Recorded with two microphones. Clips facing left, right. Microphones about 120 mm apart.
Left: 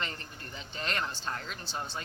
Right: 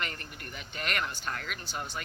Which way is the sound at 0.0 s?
25° left (ahead or behind).